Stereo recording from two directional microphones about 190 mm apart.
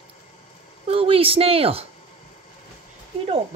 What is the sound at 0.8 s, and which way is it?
A woman's voice, 30° right (ahead or behind).